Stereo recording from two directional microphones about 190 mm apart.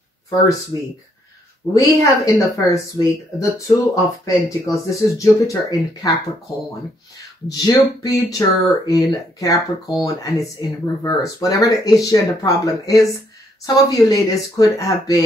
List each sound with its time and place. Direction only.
1.7 s speech: 15° left (ahead or behind)
7.4 s speech: 20° left (ahead or behind)